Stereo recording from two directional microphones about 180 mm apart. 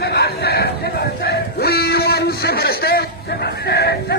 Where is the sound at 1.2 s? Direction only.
60° left (ahead or behind).